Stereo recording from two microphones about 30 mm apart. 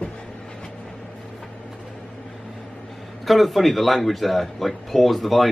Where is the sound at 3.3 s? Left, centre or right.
Centre.